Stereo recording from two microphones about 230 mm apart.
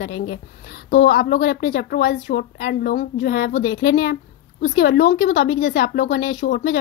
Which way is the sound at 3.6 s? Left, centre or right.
Left.